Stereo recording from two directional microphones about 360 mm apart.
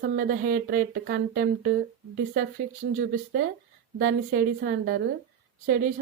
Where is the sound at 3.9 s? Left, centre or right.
Right.